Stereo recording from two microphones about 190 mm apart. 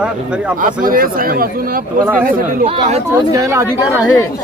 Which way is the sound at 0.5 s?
45° right (ahead or behind).